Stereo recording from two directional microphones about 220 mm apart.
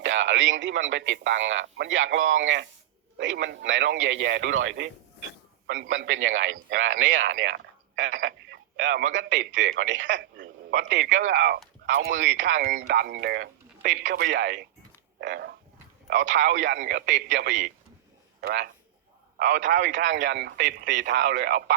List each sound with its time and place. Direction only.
0.0 s speech: 60° right (ahead or behind)
5.9 s speech: 60° right (ahead or behind)